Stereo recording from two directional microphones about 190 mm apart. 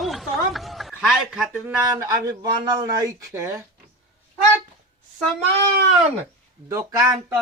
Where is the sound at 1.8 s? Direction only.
20° right (ahead or behind).